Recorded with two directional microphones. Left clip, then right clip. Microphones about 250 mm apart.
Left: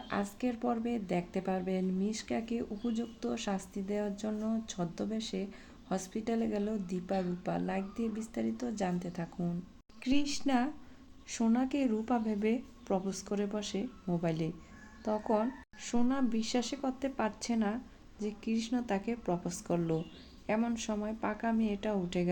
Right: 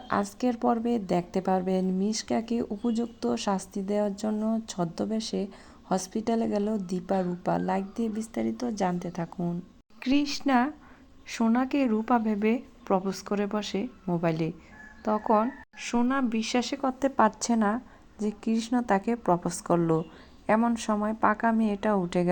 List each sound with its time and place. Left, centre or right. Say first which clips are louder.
0.1 s a woman's voice: right 8 dB; right